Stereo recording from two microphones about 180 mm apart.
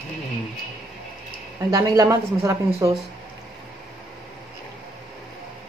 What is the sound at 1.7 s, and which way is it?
Speech, 20° right (ahead or behind).